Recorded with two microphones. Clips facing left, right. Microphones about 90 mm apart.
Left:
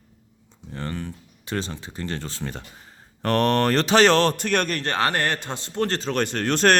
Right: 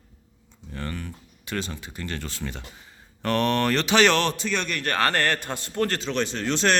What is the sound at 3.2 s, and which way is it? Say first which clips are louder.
Mantra: left 3 dB; 40° left (ahead or behind).